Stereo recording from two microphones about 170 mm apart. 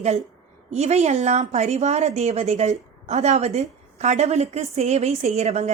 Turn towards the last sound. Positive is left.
turn(degrees=-40)  # may be behind; listen again after turning